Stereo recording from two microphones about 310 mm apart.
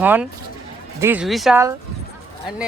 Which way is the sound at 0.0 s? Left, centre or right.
Centre.